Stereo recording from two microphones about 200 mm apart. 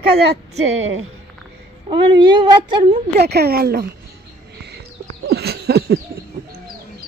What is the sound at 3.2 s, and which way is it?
Speech, 55° right (ahead or behind).